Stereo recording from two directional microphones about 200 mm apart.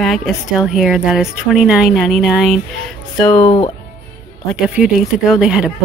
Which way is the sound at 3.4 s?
30° left (ahead or behind).